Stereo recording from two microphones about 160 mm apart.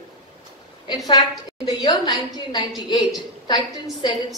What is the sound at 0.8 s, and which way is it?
A woman's voice, 25° left (ahead or behind).